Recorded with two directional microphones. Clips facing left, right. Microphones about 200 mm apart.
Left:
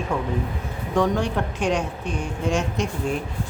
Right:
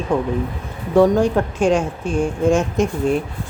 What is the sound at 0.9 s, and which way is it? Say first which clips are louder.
A woman's voice: right 8 dB; 40° right (ahead or behind).